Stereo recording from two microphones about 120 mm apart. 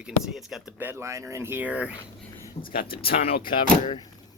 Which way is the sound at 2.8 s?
50° left (ahead or behind).